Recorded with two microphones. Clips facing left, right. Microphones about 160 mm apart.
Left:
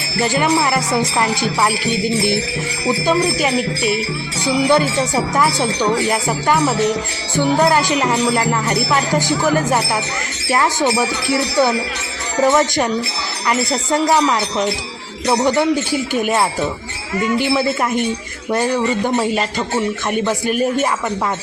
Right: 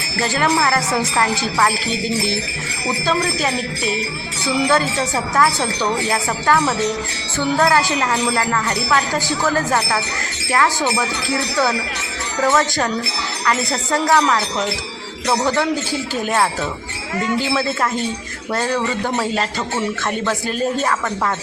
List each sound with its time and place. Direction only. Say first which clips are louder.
0.2 s jingle bell: left 2 dB; 15° left (ahead or behind)
3.1 s jingle bell: left 3 dB; 15° left (ahead or behind)
10.5 s speech: left 2 dB; 20° left (ahead or behind)
13.5 s jingle bell: left 3 dB; 20° left (ahead or behind)